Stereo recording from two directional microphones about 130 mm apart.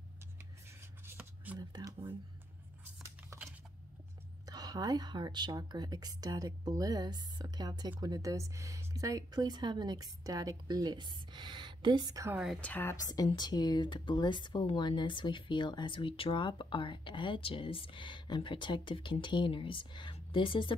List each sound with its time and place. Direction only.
0.4 s a sound: 20° right (ahead or behind)
1.6 s a woman's voice: 30° right (ahead or behind)
2.8 s a sound: 20° right (ahead or behind)
4.5 s a woman's voice: 30° right (ahead or behind)
12.5 s a woman's voice: 10° left (ahead or behind)
12.9 s speech: 30° left (ahead or behind)